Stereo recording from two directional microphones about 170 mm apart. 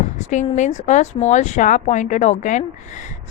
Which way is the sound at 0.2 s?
45° left (ahead or behind).